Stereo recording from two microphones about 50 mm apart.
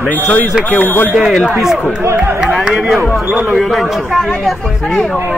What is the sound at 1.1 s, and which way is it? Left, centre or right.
Speech, centre.